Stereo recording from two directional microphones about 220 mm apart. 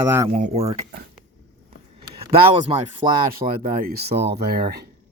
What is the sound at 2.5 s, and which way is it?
Speech, 20° right (ahead or behind).